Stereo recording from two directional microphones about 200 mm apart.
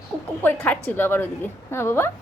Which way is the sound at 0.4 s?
10° left (ahead or behind).